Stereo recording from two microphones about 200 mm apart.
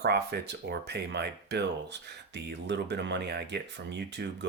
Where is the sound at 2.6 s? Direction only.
60° right (ahead or behind).